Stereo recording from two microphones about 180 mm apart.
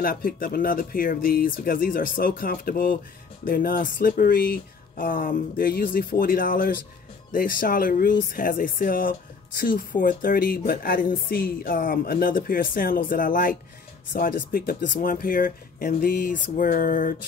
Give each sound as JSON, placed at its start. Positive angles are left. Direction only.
{"t": 0.0, "sound": "a woman's voice", "side_deg": 50}